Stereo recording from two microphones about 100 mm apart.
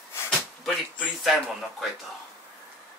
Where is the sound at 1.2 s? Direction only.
5° right (ahead or behind).